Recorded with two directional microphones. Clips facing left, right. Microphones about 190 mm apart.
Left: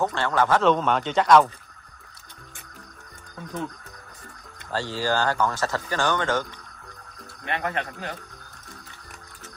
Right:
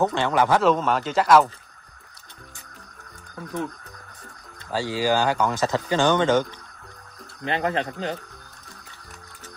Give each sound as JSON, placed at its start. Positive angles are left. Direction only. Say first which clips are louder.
{"t": 0.0, "sound": "speech", "louder": "right 2 dB", "side_deg": -15}
{"t": 4.6, "sound": "speech", "louder": "right 3 dB", "side_deg": -10}
{"t": 7.4, "sound": "speech", "louder": "right 4 dB", "side_deg": -25}